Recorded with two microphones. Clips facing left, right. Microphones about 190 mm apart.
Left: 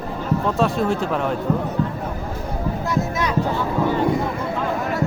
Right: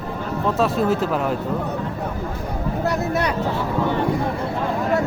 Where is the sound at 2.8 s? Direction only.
65° right (ahead or behind).